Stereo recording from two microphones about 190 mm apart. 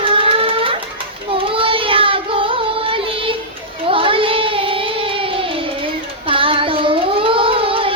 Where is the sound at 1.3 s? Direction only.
30° right (ahead or behind).